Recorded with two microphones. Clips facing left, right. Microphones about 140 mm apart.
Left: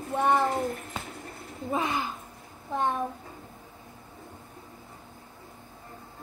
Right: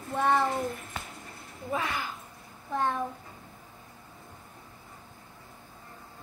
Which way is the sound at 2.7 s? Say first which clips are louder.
Left 1 dB; 20° left (ahead or behind).